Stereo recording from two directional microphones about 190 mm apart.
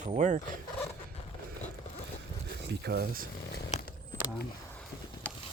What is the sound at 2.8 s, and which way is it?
Speech, 55° right (ahead or behind).